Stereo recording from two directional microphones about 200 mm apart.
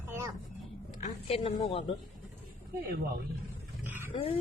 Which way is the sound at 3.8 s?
10° right (ahead or behind).